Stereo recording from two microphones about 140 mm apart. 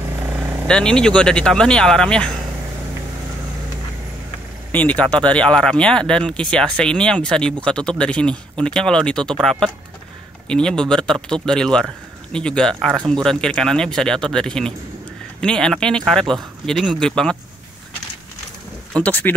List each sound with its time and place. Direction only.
0.0 s vehicle: 15° right (ahead or behind)
0.7 s speech: 5° left (ahead or behind)
4.7 s speech: 10° left (ahead or behind)
18.9 s speech: 10° left (ahead or behind)